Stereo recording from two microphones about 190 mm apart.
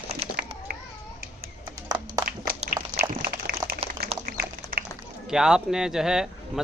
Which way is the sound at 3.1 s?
55° right (ahead or behind).